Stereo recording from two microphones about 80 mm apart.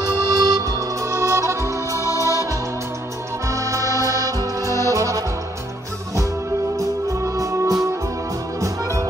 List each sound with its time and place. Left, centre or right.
0.3 s music: right
2.0 s music: left
3.4 s music: right
4.6 s music: left
4.9 s music: right
6.8 s music: right